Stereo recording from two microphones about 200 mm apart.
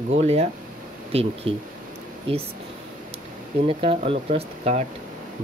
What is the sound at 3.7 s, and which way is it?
Speech, 30° right (ahead or behind).